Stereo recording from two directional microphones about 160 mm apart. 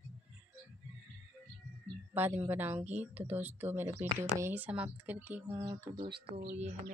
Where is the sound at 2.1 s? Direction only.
10° right (ahead or behind).